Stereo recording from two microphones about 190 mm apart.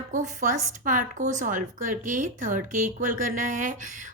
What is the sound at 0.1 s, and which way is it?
Speech, 40° right (ahead or behind).